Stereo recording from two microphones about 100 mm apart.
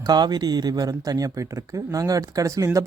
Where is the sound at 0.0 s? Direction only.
45° right (ahead or behind).